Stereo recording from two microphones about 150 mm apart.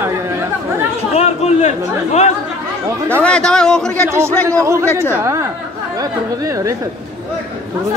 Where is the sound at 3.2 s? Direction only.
5° left (ahead or behind).